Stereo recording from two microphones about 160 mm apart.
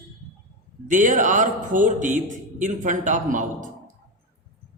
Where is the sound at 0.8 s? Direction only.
55° right (ahead or behind).